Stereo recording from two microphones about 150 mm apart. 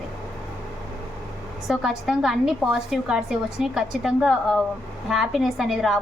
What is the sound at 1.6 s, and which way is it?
A woman's voice, 5° right (ahead or behind).